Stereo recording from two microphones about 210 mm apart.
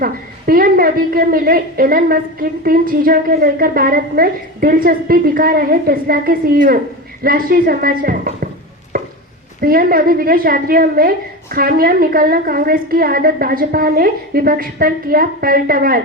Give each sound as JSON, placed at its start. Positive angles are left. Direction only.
{"t": 0.0, "sound": "a woman's voice", "side_deg": -45}
{"t": 8.9, "sound": "a sound", "side_deg": -40}
{"t": 9.6, "sound": "a woman's voice", "side_deg": -45}